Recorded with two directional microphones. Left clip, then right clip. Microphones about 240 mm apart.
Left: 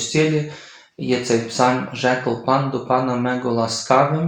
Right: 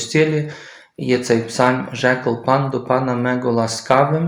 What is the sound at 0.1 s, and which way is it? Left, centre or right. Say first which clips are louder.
Speech: right 3 dB; right.